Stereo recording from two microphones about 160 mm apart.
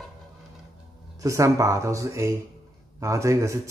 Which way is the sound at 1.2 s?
20° right (ahead or behind).